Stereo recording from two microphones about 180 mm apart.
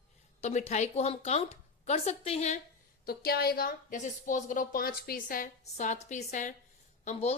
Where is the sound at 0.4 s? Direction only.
40° left (ahead or behind).